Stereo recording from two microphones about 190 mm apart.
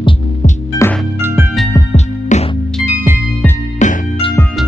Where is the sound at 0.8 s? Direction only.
15° left (ahead or behind).